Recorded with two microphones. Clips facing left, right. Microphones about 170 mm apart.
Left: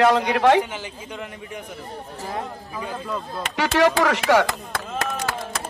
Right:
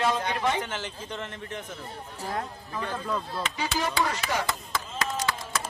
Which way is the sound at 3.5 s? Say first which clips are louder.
Left 11 dB; 85° left.